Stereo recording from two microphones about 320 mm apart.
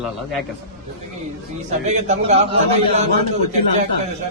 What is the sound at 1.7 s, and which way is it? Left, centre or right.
A man's voice, right.